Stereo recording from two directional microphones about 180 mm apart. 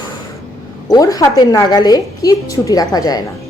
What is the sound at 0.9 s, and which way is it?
A woman's voice, 20° left (ahead or behind).